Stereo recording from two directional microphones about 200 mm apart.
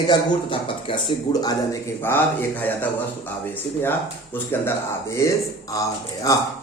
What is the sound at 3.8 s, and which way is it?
A man's voice, 10° left (ahead or behind).